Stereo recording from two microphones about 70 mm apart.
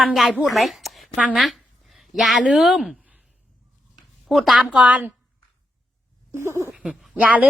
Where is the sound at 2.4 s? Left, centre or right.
Centre.